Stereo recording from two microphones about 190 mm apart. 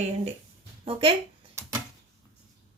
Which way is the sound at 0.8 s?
30° right (ahead or behind).